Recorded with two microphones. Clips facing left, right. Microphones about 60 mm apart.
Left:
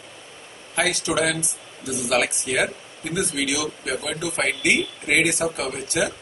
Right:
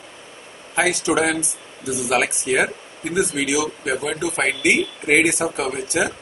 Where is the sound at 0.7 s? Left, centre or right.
Right.